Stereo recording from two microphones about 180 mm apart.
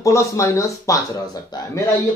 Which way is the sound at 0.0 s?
15° left (ahead or behind).